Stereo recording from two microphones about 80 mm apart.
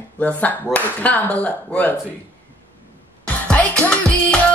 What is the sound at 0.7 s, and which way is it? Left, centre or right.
Speech, centre.